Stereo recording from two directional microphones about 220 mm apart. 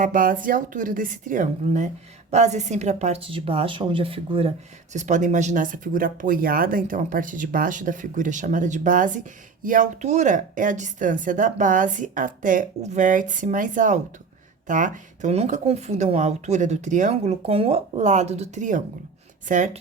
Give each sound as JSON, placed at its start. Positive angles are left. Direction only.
{"t": 0.0, "sound": "a woman's voice", "side_deg": -40}